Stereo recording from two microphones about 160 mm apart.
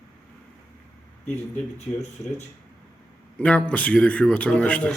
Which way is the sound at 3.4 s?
5° left (ahead or behind).